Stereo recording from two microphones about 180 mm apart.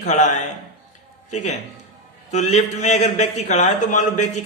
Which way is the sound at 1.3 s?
40° left (ahead or behind).